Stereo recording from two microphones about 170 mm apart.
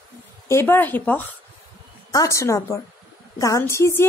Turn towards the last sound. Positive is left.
turn(degrees=15)  # may be behind; listen again after turning